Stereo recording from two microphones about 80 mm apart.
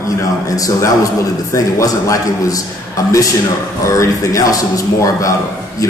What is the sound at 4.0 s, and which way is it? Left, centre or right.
A man's voice, left.